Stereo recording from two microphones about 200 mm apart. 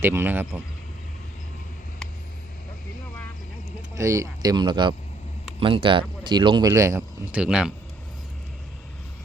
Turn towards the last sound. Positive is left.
turn(degrees=-5)  # may be behind; listen again after turning